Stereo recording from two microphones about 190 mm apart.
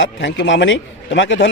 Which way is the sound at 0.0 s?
70° left (ahead or behind).